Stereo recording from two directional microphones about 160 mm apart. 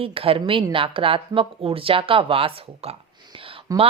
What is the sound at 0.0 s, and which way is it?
Speech, 35° right (ahead or behind).